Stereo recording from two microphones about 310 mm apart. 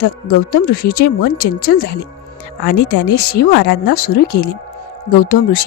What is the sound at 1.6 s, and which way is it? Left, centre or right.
Speech, left.